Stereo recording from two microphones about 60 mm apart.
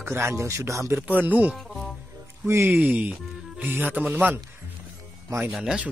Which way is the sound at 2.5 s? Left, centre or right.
Right.